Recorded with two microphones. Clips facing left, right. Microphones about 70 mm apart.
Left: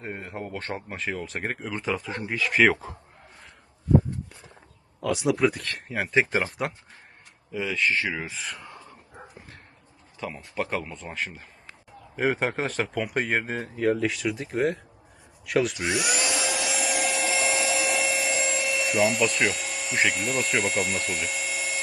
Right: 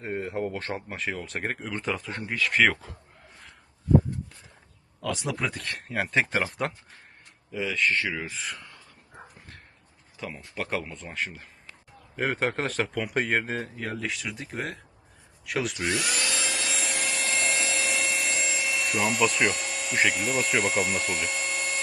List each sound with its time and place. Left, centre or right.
0.0 s speech: centre
5.0 s speech: centre
8.5 s a sound: left
10.2 s speech: centre
15.9 s tools: centre